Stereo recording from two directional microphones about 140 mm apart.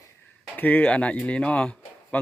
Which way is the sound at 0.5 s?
10° left (ahead or behind).